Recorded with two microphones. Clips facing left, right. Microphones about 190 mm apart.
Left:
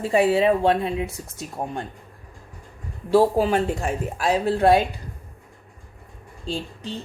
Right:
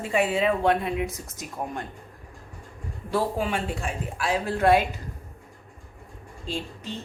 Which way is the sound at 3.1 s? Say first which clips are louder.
Left 8 dB; 35° left (ahead or behind).